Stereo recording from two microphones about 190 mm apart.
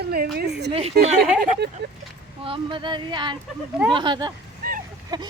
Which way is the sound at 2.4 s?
25° right (ahead or behind).